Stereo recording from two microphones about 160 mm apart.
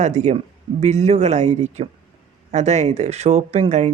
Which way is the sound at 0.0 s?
45° right (ahead or behind).